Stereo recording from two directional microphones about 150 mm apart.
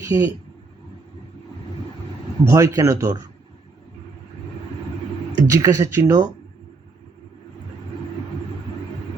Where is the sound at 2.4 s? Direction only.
20° right (ahead or behind).